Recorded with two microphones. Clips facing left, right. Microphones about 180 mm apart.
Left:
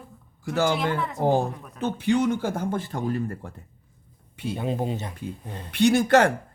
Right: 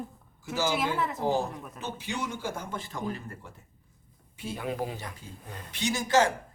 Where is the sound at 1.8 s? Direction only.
55° left (ahead or behind).